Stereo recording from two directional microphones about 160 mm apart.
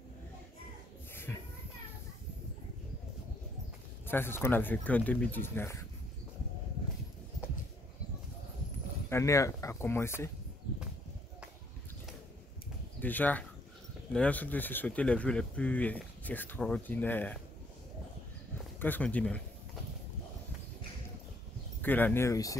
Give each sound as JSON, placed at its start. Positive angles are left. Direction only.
{"t": 1.3, "sound": "a sound", "side_deg": 10}
{"t": 4.1, "sound": "speech", "side_deg": 15}
{"t": 9.1, "sound": "speech", "side_deg": 20}
{"t": 13.0, "sound": "speech", "side_deg": 10}
{"t": 18.8, "sound": "speech", "side_deg": 10}
{"t": 21.8, "sound": "speech", "side_deg": 10}